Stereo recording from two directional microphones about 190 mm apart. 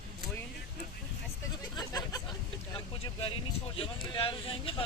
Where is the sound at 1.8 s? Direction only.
20° left (ahead or behind).